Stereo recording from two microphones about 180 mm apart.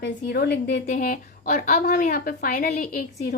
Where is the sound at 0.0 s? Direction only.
65° left (ahead or behind).